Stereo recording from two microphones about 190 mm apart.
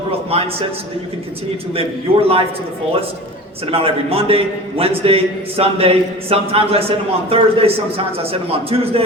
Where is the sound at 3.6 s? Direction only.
30° right (ahead or behind).